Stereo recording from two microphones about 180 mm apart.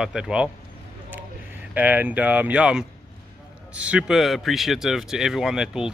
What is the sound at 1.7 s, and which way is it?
A man's voice, 10° right (ahead or behind).